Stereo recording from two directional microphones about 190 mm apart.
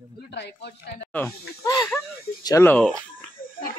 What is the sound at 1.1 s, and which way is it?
Speech, 10° left (ahead or behind).